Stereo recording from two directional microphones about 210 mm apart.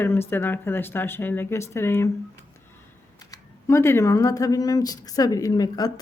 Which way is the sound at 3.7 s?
15° left (ahead or behind).